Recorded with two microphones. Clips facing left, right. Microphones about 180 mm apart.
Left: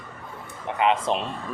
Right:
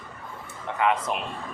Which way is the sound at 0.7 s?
25° left (ahead or behind).